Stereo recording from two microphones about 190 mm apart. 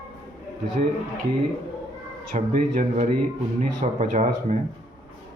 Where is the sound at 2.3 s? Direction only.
45° right (ahead or behind).